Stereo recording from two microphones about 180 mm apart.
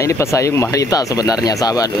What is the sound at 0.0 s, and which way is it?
Speech, 15° left (ahead or behind).